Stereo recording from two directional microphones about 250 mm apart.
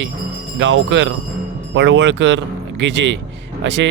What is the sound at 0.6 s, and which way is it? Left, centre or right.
Speech, right.